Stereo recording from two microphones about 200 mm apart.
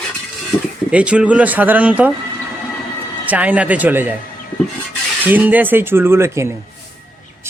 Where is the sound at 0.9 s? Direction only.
5° right (ahead or behind).